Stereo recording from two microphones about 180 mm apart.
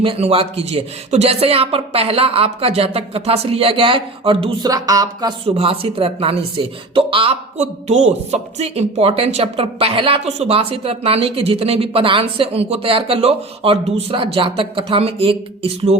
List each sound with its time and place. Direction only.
0.0 s speech: 30° right (ahead or behind)
4.7 s speech: 20° right (ahead or behind)
5.5 s speech: 30° right (ahead or behind)